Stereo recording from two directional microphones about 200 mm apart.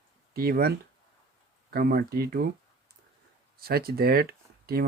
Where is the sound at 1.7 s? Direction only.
50° right (ahead or behind).